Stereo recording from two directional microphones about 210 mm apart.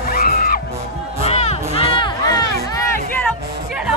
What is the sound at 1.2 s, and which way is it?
Music, 30° left (ahead or behind).